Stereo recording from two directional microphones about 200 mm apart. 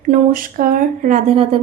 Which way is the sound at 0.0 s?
40° right (ahead or behind).